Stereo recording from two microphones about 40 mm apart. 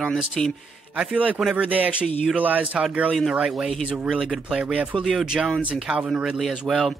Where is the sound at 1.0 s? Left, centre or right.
Right.